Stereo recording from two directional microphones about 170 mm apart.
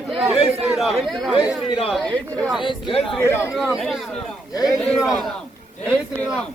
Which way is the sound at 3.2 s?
15° left (ahead or behind).